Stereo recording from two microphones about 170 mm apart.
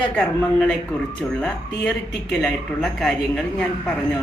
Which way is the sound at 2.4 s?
Centre (ahead or behind).